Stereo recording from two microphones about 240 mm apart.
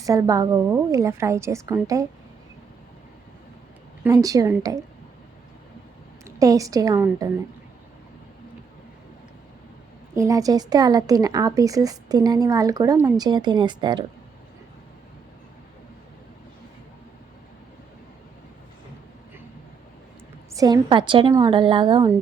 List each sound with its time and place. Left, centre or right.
0.0 s speech: centre
4.0 s speech: centre
6.2 s a woman's voice: centre
10.2 s speech: centre
20.6 s a woman's voice: centre